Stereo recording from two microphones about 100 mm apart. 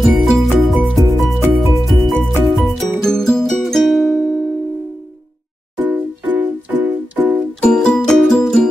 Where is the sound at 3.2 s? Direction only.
5° left (ahead or behind).